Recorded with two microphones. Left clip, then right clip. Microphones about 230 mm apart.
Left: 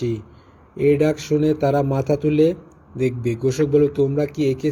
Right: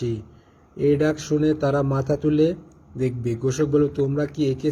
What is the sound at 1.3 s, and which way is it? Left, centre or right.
A man's voice, centre.